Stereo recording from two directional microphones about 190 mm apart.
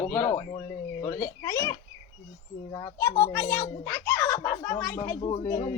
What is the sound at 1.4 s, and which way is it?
A child's voice, 20° left (ahead or behind).